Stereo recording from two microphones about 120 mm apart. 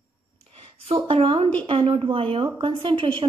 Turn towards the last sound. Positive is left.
turn(degrees=-45)  # may be behind; listen again after turning